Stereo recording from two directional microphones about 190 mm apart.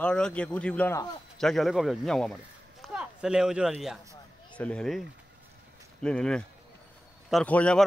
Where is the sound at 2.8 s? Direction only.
5° right (ahead or behind).